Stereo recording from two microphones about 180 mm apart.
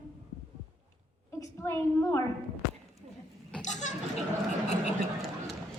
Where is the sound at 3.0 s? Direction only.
40° right (ahead or behind).